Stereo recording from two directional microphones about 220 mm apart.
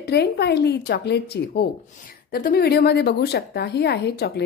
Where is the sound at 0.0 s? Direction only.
50° left (ahead or behind).